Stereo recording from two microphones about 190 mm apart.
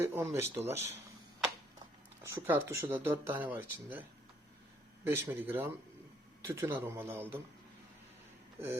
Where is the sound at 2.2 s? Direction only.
15° right (ahead or behind).